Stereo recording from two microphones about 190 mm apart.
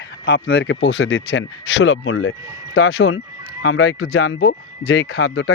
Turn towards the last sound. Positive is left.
turn(degrees=60)  # may be behind; listen again after turning